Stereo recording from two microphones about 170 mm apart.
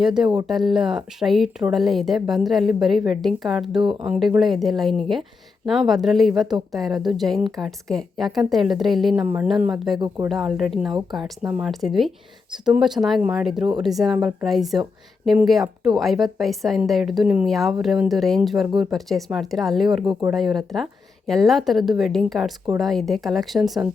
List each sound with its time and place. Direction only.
0.0 s speech: 5° right (ahead or behind)
3.8 s speech: 30° right (ahead or behind)
4.0 s speech: 5° right (ahead or behind)
9.2 s speech: 10° right (ahead or behind)